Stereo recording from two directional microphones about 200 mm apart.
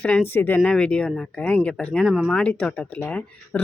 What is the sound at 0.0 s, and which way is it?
Speech, 5° left (ahead or behind).